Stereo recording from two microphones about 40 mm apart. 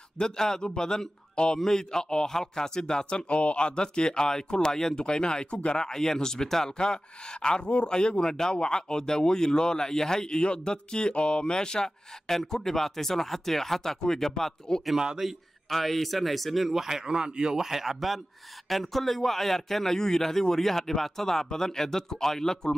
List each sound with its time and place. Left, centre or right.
0.2 s a man's voice: centre
1.6 s a man's voice: centre
3.3 s speech: left; by 14.8 s centre
15.0 s a man's voice: centre
15.2 s a man's voice: centre